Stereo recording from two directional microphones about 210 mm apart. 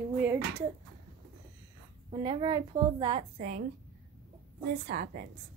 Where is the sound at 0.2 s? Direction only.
10° right (ahead or behind).